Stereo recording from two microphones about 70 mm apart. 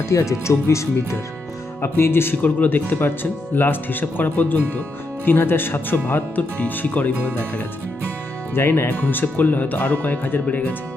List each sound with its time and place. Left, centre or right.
0.1 s speech: left
8.5 s speech: left